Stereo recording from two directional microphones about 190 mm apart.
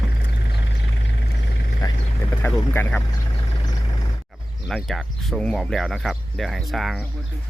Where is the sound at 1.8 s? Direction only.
20° left (ahead or behind).